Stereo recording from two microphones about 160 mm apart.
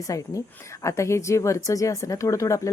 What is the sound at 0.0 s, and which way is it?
A woman's voice, 20° left (ahead or behind).